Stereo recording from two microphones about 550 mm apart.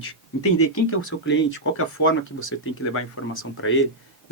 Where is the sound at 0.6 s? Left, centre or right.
Left.